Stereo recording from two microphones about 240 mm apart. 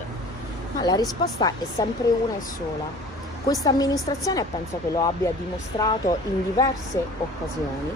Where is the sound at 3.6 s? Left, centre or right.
Centre.